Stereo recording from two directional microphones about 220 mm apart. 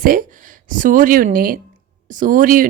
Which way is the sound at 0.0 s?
40° right (ahead or behind).